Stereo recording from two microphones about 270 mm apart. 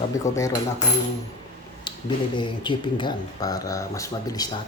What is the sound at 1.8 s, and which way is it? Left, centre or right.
Speech, centre.